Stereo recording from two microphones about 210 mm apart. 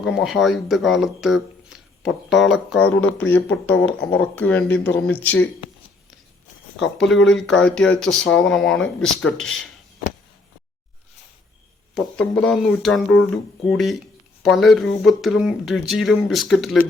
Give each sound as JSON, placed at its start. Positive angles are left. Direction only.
{"t": 0.0, "sound": "speech", "side_deg": 0}
{"t": 7.3, "sound": "speech", "side_deg": 0}
{"t": 11.9, "sound": "speech", "side_deg": 5}